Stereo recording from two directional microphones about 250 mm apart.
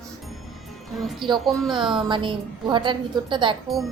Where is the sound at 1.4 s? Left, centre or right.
Centre.